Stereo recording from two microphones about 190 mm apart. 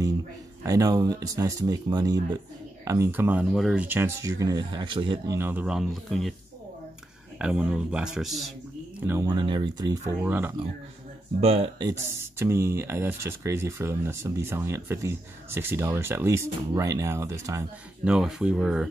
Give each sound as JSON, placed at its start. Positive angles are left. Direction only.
{"t": 0.7, "sound": "speech", "side_deg": -20}
{"t": 5.4, "sound": "speech", "side_deg": -10}
{"t": 7.3, "sound": "speech", "side_deg": -5}
{"t": 9.0, "sound": "speech", "side_deg": -15}
{"t": 10.2, "sound": "speech", "side_deg": -10}
{"t": 11.4, "sound": "speech", "side_deg": -30}
{"t": 11.8, "sound": "speech", "side_deg": -15}
{"t": 18.0, "sound": "speech", "side_deg": -5}